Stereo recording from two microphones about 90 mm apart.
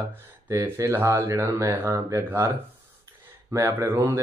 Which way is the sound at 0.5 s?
35° right (ahead or behind).